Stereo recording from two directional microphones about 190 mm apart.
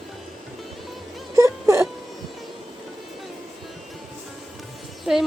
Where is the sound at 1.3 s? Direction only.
15° right (ahead or behind).